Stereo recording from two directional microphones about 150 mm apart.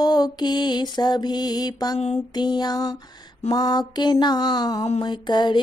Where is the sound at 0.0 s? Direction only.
30° left (ahead or behind).